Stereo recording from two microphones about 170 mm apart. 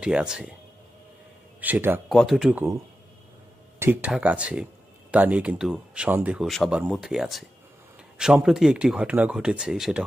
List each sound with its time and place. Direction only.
0.0 s speech: 5° right (ahead or behind)
1.6 s speech: 10° right (ahead or behind)
2.0 s speech: centre (ahead or behind)
3.8 s speech: 10° right (ahead or behind)